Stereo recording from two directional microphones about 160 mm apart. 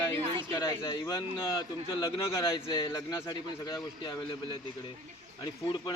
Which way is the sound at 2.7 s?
30° left (ahead or behind).